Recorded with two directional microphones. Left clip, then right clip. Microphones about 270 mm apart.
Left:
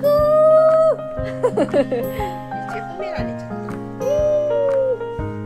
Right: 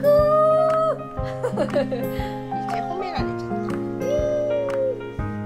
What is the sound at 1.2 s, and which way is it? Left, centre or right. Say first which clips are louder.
Speech: left 5 dB; left.